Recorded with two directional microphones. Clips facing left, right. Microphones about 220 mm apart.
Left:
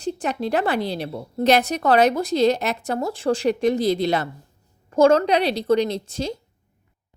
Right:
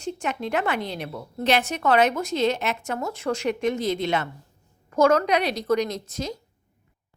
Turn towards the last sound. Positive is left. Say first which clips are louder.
# left 4 dB
turn(degrees=30)  # may be behind; listen again after turning